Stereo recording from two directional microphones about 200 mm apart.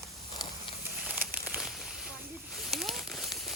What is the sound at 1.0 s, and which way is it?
Crumpling, 10° right (ahead or behind).